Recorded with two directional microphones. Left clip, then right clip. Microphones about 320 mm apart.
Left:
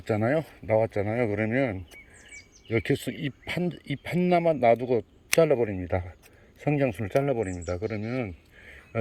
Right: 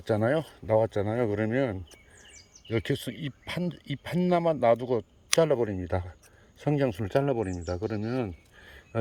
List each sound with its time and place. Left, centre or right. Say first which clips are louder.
0.0 s speech: even; centre